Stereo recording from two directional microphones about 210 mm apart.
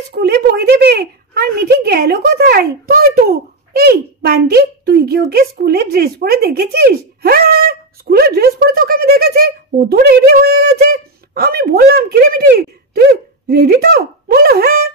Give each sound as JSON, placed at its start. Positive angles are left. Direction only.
{"t": 0.1, "sound": "a woman's voice", "side_deg": -50}